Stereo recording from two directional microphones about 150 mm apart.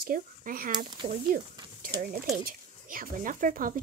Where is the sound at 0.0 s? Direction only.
70° right (ahead or behind).